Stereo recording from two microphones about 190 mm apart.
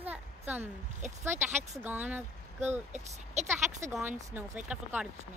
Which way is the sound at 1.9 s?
10° right (ahead or behind).